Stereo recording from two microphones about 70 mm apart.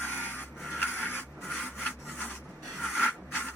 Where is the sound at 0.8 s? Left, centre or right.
Left.